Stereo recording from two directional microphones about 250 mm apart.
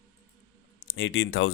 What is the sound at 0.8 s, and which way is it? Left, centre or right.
Speech, left.